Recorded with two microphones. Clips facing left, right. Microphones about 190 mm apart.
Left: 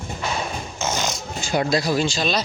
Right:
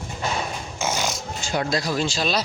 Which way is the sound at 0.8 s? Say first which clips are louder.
Even; 10° right (ahead or behind).